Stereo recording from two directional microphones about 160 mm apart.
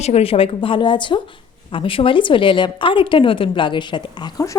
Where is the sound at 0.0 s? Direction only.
40° left (ahead or behind).